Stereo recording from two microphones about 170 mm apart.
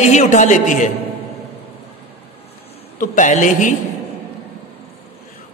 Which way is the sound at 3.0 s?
50° left (ahead or behind).